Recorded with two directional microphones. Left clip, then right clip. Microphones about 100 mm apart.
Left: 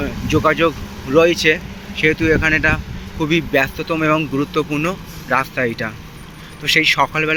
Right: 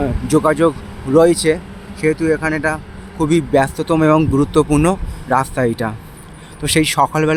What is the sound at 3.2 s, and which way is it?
Speech, 60° right (ahead or behind).